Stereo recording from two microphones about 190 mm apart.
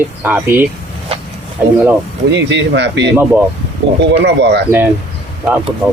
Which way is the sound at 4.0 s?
65° right (ahead or behind).